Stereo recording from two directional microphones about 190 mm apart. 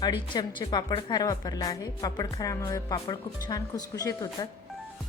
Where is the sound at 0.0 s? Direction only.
20° left (ahead or behind).